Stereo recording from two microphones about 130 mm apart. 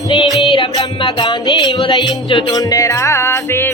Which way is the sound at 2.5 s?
25° left (ahead or behind).